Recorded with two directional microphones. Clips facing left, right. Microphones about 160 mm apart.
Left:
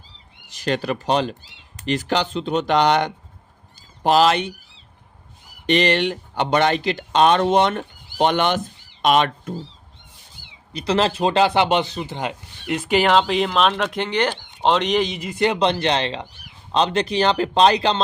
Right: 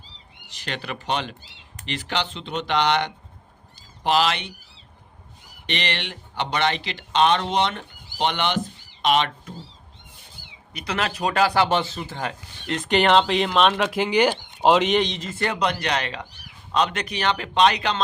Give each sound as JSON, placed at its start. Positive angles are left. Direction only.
{"t": 0.4, "sound": "speech", "side_deg": 45}
{"t": 5.6, "sound": "speech", "side_deg": 45}
{"t": 10.7, "sound": "speech", "side_deg": 30}